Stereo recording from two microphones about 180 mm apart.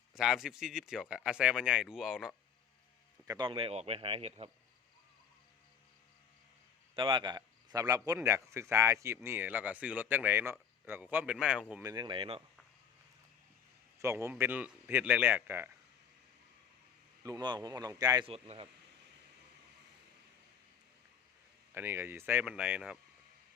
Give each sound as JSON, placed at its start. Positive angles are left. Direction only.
{"t": 0.1, "sound": "speech", "side_deg": 0}
{"t": 3.2, "sound": "speech", "side_deg": -25}
{"t": 6.9, "sound": "a man's voice", "side_deg": -25}
{"t": 11.8, "sound": "speech", "side_deg": -20}
{"t": 14.0, "sound": "a man's voice", "side_deg": -15}
{"t": 17.2, "sound": "speech", "side_deg": -20}
{"t": 18.3, "sound": "speech", "side_deg": -35}
{"t": 21.7, "sound": "a man's voice", "side_deg": -10}